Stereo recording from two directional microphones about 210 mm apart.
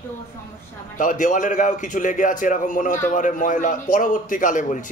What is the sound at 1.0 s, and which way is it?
A man's voice, 40° left (ahead or behind).